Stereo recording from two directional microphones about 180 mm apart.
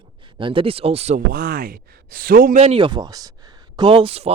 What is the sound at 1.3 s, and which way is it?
Speech, 55° right (ahead or behind).